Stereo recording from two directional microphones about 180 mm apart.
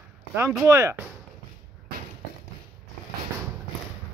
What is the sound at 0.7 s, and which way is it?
Speech, 15° right (ahead or behind).